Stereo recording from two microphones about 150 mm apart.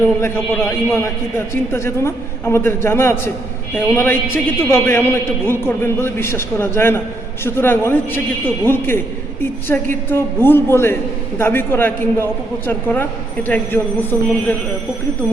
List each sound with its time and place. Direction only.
0.0 s a man's voice: 15° left (ahead or behind)